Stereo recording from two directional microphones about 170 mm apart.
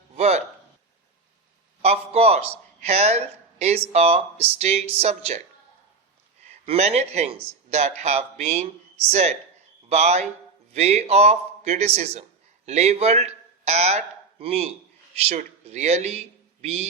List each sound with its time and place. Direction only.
0.2 s a sound: 40° right (ahead or behind)
1.8 s a man's voice: 35° right (ahead or behind)
6.4 s speech: 40° right (ahead or behind)